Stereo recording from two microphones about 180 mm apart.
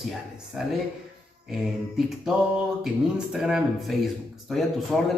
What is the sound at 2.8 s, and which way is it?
Speech, centre (ahead or behind).